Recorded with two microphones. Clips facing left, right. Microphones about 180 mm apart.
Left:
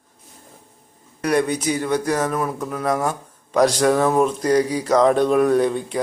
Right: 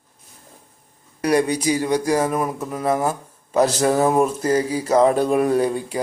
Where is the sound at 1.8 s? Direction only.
10° right (ahead or behind).